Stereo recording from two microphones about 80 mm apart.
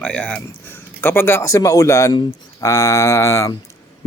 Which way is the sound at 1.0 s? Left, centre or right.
Left.